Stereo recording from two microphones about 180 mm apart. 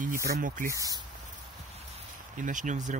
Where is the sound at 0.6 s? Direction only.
20° right (ahead or behind).